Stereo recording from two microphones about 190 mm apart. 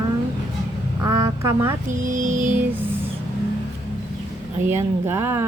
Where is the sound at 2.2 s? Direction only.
40° right (ahead or behind).